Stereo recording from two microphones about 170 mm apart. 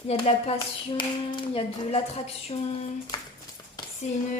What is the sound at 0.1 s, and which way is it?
Speech, 35° left (ahead or behind).